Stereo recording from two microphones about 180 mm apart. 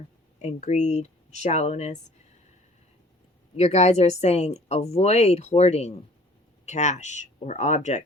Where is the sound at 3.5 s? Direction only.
35° left (ahead or behind).